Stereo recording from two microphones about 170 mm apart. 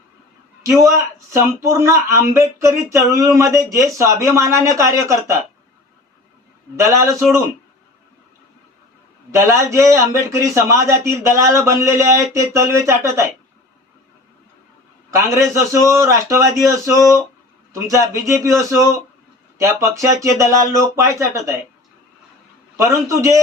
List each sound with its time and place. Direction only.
0.6 s a man's voice: 20° right (ahead or behind)
6.7 s a man's voice: 15° right (ahead or behind)
9.3 s a man's voice: 15° right (ahead or behind)
15.1 s a man's voice: 20° right (ahead or behind)
22.8 s speech: 20° right (ahead or behind)